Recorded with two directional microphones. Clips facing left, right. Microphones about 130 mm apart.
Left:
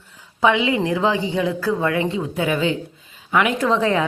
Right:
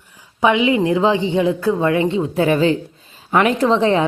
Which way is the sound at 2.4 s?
40° right (ahead or behind).